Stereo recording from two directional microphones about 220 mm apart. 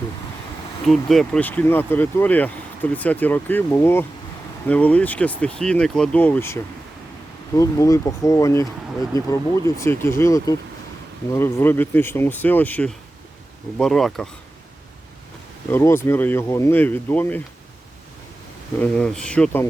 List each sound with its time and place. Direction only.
0.9 s speech: centre (ahead or behind)
15.7 s speech: 10° left (ahead or behind)
18.8 s speech: 5° left (ahead or behind)